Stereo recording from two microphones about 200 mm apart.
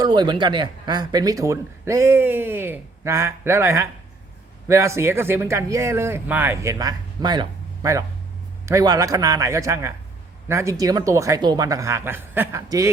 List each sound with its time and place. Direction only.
0.0 s speech: 20° right (ahead or behind)